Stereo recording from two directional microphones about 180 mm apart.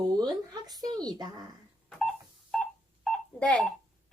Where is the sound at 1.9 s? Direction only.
Centre (ahead or behind).